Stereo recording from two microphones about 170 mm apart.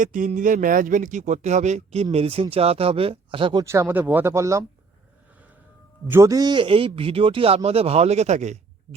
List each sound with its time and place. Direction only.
0.0 s speech: 50° right (ahead or behind); by 4.6 s 15° right (ahead or behind)
6.1 s a man's voice: 15° right (ahead or behind); by 9.0 s 40° right (ahead or behind)